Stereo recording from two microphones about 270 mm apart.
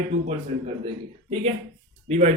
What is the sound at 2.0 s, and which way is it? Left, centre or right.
Speech, right.